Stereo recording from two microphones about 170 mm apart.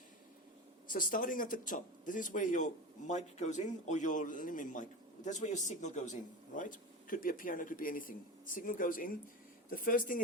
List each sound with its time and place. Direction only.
0.9 s a man's voice: 55° left (ahead or behind)